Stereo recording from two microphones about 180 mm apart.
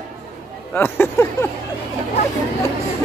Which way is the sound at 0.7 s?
10° left (ahead or behind).